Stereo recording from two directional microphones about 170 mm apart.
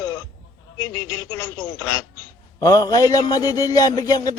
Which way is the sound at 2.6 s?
20° left (ahead or behind).